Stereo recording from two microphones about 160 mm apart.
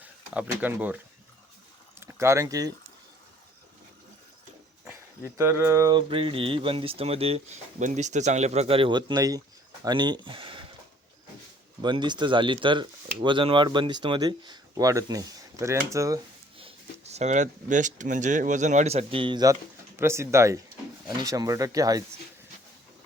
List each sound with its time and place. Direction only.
0.0 s speech: 10° right (ahead or behind)
4.9 s speech: 15° right (ahead or behind); by 10.7 s 30° right (ahead or behind)
11.8 s speech: 30° right (ahead or behind)
16.6 s speech: 40° right (ahead or behind)
20.0 s speech: 15° right (ahead or behind)